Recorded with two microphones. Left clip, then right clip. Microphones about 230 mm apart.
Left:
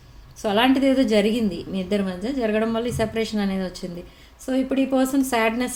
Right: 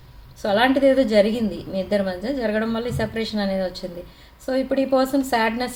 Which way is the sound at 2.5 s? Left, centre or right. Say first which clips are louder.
Left 1 dB; left.